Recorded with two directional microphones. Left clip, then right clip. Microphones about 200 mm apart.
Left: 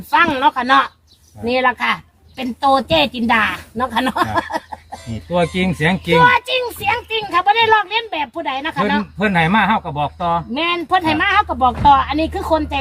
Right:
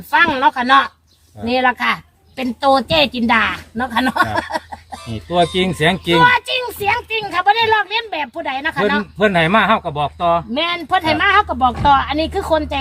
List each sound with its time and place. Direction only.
0.1 s a woman's voice: 10° right (ahead or behind)
5.1 s speech: 50° right (ahead or behind)
6.1 s a woman's voice: 15° right (ahead or behind)
9.1 s speech: 45° right (ahead or behind)
10.5 s a woman's voice: 15° right (ahead or behind)